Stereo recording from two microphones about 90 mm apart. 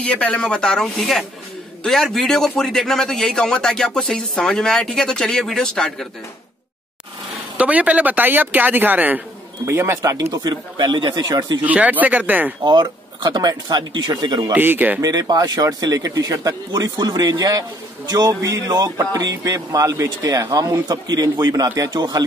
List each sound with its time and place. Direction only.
0.0 s a man's voice: 15° left (ahead or behind)
7.5 s speech: 15° right (ahead or behind)
9.7 s speech: 30° right (ahead or behind); by 11.2 s 60° right (ahead or behind)
11.2 s speech: 50° right (ahead or behind)
11.6 s speech: 15° right (ahead or behind)
12.6 s speech: 55° right (ahead or behind)
14.5 s speech: 20° right (ahead or behind)
15.0 s speech: 45° right (ahead or behind)
21.9 s speech: 60° right (ahead or behind)